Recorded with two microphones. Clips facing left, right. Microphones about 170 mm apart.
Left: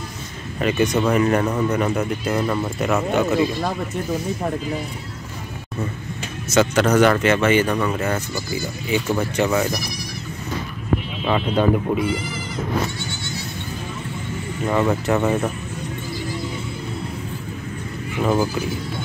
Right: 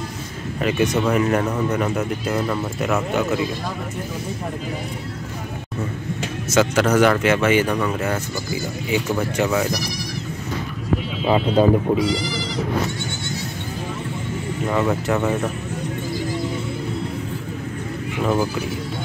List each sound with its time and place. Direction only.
0.6 s speech: 5° right (ahead or behind)
6.5 s speech: 5° right (ahead or behind)
9.1 s speech: 5° right (ahead or behind)
11.2 s speech: 30° right (ahead or behind)
12.0 s speech: 90° right
14.7 s speech: centre (ahead or behind)
18.2 s speech: 5° left (ahead or behind)